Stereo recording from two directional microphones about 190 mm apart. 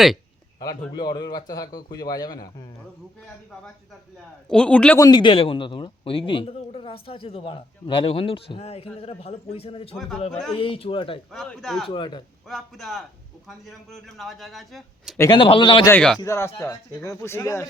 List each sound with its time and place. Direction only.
0.6 s a man's voice: 20° left (ahead or behind)
4.4 s a man's voice: 5° left (ahead or behind)
4.9 s a man's voice: 20° left (ahead or behind)
9.9 s a man's voice: centre (ahead or behind)
10.6 s a man's voice: 30° left (ahead or behind)
11.3 s a man's voice: 5° left (ahead or behind)
11.9 s a man's voice: 25° left (ahead or behind)
12.5 s a man's voice: centre (ahead or behind)
15.2 s a man's voice: 25° left (ahead or behind)
15.9 s a man's voice: 5° left (ahead or behind)
16.2 s speech: 15° left (ahead or behind)